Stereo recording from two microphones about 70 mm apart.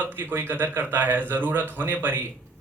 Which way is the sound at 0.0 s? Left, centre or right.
Right.